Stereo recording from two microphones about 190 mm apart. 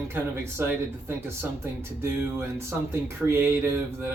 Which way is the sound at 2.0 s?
15° right (ahead or behind).